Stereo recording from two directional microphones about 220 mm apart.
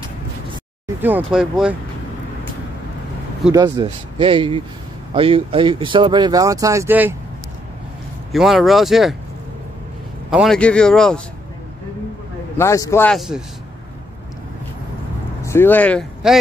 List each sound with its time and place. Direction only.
1.0 s speech: 5° right (ahead or behind)
3.5 s speech: 15° right (ahead or behind)
8.3 s speech: centre (ahead or behind)
10.3 s speech: centre (ahead or behind)
12.5 s a man's voice: 15° left (ahead or behind)
15.4 s speech: 10° left (ahead or behind)